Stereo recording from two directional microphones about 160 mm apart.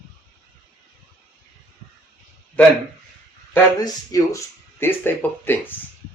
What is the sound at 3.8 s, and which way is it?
A man's voice, 20° left (ahead or behind).